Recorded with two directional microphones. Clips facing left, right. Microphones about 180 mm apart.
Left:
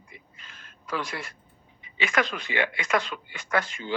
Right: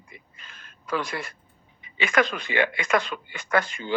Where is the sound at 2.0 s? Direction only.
55° right (ahead or behind).